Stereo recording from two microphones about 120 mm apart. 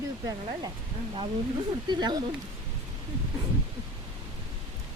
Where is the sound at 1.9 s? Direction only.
35° right (ahead or behind).